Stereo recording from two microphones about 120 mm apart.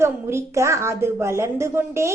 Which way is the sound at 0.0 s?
20° right (ahead or behind).